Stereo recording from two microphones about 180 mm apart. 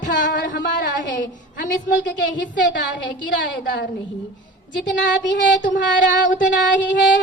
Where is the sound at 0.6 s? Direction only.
80° left.